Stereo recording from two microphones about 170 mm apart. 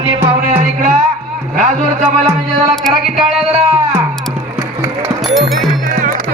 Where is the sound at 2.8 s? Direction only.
Centre (ahead or behind).